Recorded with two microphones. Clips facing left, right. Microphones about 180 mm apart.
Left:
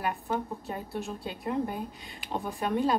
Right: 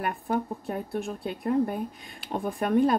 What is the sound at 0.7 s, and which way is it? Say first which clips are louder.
Speech: right 4 dB; 55° right (ahead or behind).